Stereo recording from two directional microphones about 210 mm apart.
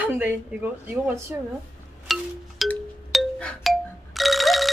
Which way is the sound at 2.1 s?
Centre (ahead or behind).